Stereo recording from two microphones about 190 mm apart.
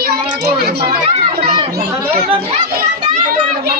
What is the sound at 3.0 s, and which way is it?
Children playing, 50° right (ahead or behind).